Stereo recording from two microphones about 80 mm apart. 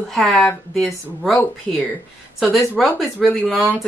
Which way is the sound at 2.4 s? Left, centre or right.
Centre.